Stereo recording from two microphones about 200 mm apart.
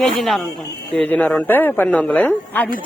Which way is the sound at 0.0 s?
Centre (ahead or behind).